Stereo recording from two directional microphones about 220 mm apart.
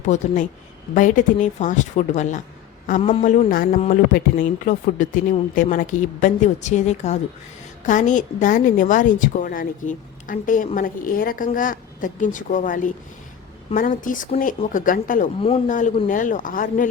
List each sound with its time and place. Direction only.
0.0 s a woman's voice: 35° left (ahead or behind)
3.5 s a woman's voice: 40° left (ahead or behind)
15.4 s a woman's voice: 25° left (ahead or behind)
15.6 s a woman's voice: 35° left (ahead or behind)